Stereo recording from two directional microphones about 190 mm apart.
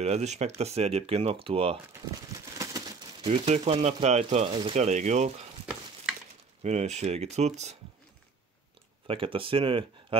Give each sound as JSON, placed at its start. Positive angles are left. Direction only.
{"t": 0.0, "sound": "speech", "side_deg": -35}
{"t": 2.5, "sound": "a sound", "side_deg": -20}
{"t": 3.3, "sound": "speech", "side_deg": -35}
{"t": 6.6, "sound": "speech", "side_deg": -35}
{"t": 9.0, "sound": "speech", "side_deg": -30}